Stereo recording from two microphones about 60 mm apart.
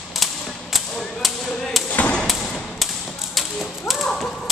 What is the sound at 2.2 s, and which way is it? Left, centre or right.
Thump, centre.